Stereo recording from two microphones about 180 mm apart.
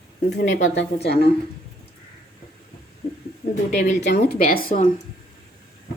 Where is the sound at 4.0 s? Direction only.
60° left (ahead or behind).